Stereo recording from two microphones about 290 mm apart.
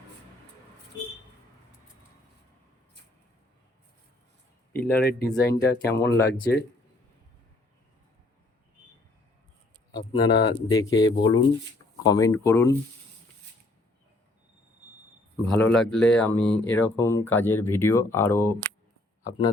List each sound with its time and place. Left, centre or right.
4.7 s speech: left
9.9 s speech: centre
15.4 s speech: centre